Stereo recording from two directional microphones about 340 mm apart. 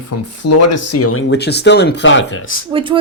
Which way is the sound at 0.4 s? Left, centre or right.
Left.